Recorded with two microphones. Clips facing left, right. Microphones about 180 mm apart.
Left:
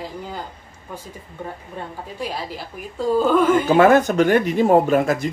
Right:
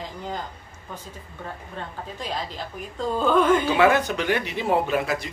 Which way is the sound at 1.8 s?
10° left (ahead or behind).